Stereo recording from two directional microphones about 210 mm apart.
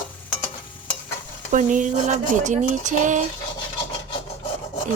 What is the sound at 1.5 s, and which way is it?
Speech, 35° right (ahead or behind).